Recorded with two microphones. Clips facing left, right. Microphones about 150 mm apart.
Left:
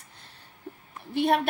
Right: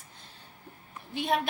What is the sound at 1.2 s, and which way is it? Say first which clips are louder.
Speech: left 5 dB; 60° left (ahead or behind).